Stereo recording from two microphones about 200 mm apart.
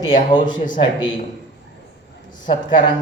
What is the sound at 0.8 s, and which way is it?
Speech, 25° left (ahead or behind).